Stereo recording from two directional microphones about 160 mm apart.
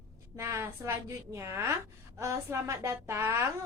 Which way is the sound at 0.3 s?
15° right (ahead or behind).